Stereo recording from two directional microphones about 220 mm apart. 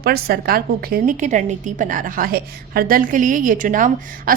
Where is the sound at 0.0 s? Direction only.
45° right (ahead or behind).